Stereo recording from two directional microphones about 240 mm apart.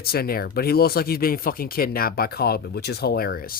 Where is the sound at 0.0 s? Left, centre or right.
Left.